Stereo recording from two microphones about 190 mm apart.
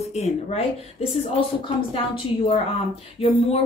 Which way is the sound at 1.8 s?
30° left (ahead or behind).